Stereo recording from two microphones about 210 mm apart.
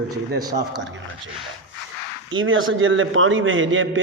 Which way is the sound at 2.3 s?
70° right (ahead or behind).